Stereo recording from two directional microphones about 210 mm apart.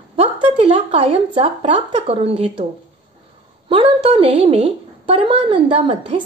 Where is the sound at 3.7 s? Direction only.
25° right (ahead or behind).